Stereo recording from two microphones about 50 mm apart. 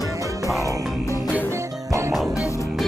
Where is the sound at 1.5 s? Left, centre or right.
Right.